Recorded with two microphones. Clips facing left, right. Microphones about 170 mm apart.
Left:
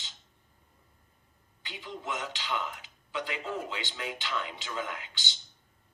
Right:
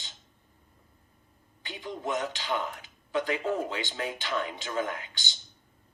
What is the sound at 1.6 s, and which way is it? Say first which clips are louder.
A man's voice: right 4 dB; 45° right (ahead or behind).